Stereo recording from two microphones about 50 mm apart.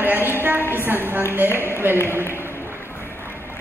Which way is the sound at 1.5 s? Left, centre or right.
Left.